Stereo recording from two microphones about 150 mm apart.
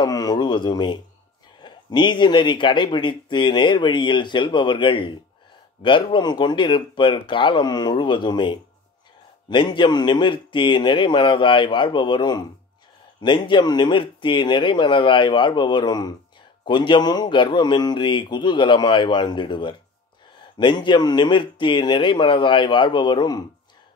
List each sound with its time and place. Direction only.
0.0 s speech: 25° left (ahead or behind)